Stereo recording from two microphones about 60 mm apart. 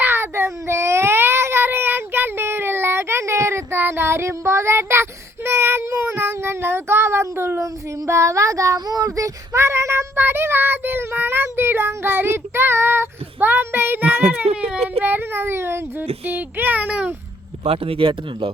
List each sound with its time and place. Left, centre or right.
0.0 s baby cry: right
7.6 s child singing: right
10.2 s child singing: right